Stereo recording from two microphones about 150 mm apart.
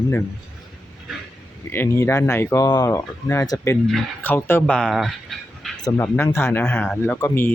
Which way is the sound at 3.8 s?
10° left (ahead or behind).